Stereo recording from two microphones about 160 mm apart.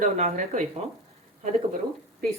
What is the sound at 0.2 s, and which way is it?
Speech, 40° right (ahead or behind).